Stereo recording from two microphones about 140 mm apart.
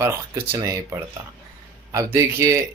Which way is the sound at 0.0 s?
15° right (ahead or behind).